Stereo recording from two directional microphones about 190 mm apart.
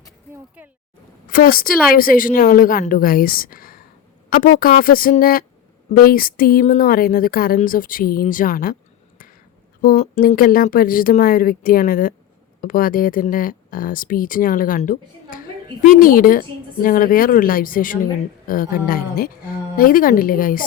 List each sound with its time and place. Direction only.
1.3 s a woman's voice: 50° left (ahead or behind)
9.8 s a woman's voice: 50° left (ahead or behind)